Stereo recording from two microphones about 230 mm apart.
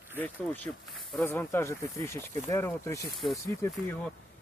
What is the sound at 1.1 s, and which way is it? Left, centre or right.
Speech, centre.